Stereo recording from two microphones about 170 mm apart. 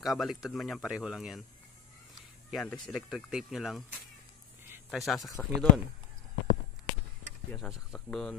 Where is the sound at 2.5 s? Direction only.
5° left (ahead or behind).